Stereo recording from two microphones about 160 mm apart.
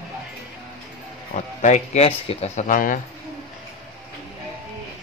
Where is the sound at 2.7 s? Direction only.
55° left (ahead or behind).